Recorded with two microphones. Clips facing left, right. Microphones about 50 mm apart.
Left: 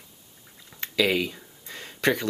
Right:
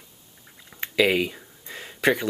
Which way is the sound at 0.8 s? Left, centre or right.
Centre.